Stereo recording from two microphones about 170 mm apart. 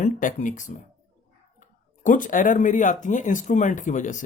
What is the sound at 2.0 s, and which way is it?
Speech, 50° left (ahead or behind).